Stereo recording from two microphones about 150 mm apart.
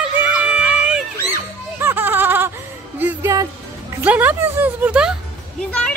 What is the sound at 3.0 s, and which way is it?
Music, 15° right (ahead or behind).